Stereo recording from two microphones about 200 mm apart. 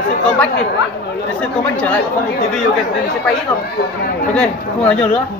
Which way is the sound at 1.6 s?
5° left (ahead or behind).